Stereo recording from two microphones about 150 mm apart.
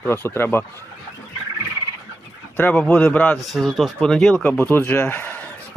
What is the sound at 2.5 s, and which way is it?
Speech, 10° left (ahead or behind).